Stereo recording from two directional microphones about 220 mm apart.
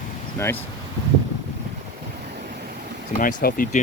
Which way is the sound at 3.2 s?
40° left (ahead or behind).